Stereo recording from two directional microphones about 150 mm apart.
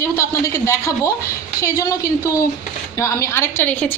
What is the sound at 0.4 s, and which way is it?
A woman's voice, 20° left (ahead or behind).